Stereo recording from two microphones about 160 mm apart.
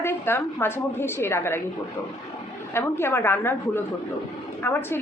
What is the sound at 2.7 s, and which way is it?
Speech, 15° left (ahead or behind).